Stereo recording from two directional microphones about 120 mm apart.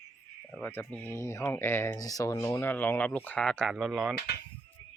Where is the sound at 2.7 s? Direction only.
15° left (ahead or behind); by 4.1 s centre (ahead or behind).